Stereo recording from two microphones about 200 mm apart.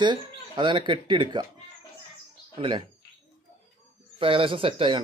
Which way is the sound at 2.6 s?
25° right (ahead or behind).